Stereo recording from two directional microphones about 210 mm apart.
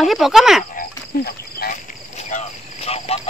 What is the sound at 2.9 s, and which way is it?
Cricket, 30° left (ahead or behind).